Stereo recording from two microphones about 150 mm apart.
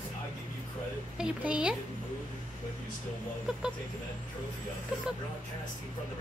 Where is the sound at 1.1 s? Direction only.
5° right (ahead or behind).